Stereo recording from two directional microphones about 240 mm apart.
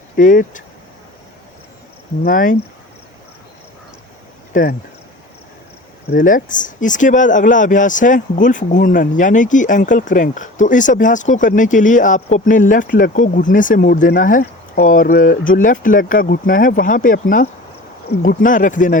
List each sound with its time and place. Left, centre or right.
0.2 s speech: left
2.2 s speech: left
4.5 s speech: left
6.1 s speech: left